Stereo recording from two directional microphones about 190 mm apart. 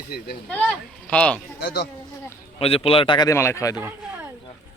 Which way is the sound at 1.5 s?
65° left (ahead or behind).